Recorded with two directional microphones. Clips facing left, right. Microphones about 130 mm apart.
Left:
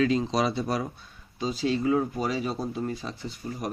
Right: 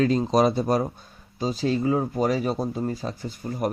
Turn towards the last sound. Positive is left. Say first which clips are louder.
# right 6 dB
turn(degrees=-45)  # may be behind; listen again after turning